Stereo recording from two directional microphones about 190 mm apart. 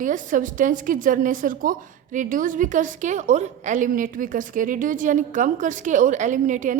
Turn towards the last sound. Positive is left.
turn(degrees=-40)  # may be behind; listen again after turning